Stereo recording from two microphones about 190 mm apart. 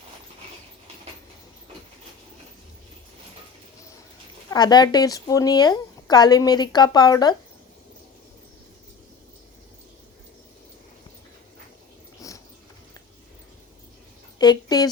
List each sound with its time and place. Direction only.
4.5 s speech: 20° left (ahead or behind)
12.2 s biting: 15° left (ahead or behind)
14.3 s speech: 20° left (ahead or behind)